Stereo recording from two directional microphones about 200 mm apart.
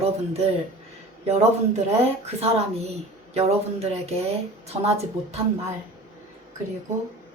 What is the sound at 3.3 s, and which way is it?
Speech, 30° right (ahead or behind).